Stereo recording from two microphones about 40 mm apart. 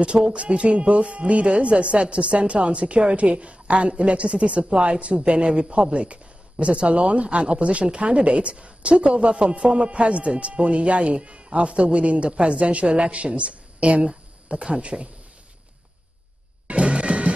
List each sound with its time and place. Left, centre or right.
0.0 s speech: right
16.6 s music: right